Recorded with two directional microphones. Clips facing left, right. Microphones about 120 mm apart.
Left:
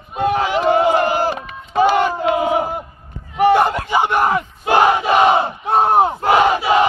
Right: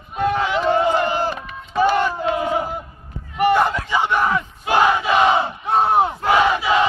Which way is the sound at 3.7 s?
50° left (ahead or behind).